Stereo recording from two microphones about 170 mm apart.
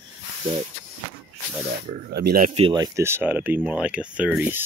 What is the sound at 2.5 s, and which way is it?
Speech, 35° right (ahead or behind).